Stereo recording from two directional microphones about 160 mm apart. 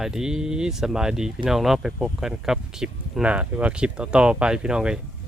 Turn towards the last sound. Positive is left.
turn(degrees=-5)  # may be behind; listen again after turning